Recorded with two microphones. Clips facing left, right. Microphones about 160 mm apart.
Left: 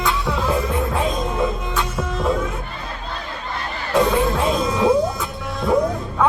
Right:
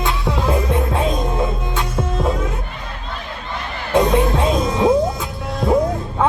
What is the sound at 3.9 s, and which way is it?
Music, 30° right (ahead or behind).